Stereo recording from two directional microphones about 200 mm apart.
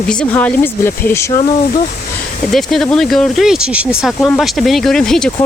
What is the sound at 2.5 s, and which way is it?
Speech, centre (ahead or behind).